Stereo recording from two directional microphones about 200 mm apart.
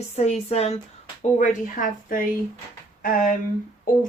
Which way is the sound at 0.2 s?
35° left (ahead or behind).